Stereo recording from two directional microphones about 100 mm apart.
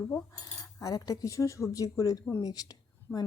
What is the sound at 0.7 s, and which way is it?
Speech, 35° left (ahead or behind).